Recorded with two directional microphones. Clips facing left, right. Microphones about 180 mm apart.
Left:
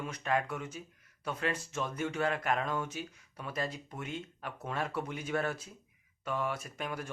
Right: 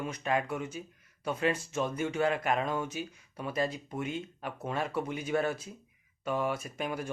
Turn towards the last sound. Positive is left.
turn(degrees=-10)  # may be behind; listen again after turning